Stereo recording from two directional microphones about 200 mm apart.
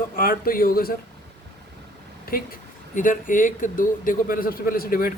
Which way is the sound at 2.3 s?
45° left (ahead or behind).